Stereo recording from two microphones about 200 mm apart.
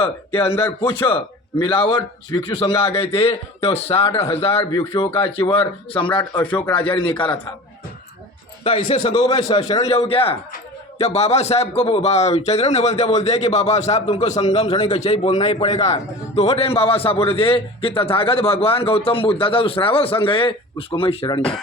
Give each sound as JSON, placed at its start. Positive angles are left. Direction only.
{"t": 0.3, "sound": "speech", "side_deg": 10}
{"t": 1.5, "sound": "a man's voice", "side_deg": 25}
{"t": 8.6, "sound": "a man's voice", "side_deg": 30}